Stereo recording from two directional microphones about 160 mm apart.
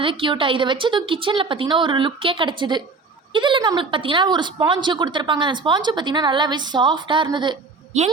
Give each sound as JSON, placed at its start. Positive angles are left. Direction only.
{"t": 0.0, "sound": "a woman's voice", "side_deg": -30}
{"t": 7.9, "sound": "a child's voice", "side_deg": -45}